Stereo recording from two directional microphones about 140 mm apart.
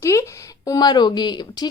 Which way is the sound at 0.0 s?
20° left (ahead or behind).